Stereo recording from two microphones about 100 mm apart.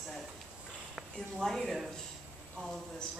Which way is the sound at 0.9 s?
5° left (ahead or behind).